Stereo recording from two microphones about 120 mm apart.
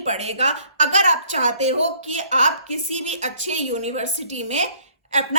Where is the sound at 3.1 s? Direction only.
75° right (ahead or behind).